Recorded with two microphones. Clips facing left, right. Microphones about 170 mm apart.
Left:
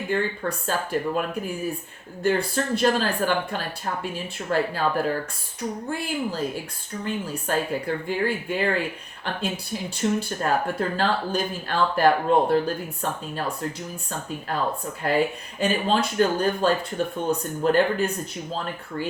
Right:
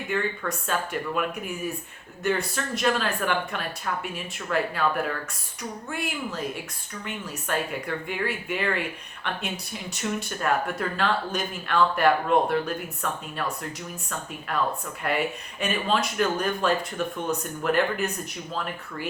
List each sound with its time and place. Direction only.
0.1 s speech: 30° left (ahead or behind)
9.9 s speech: 30° left (ahead or behind)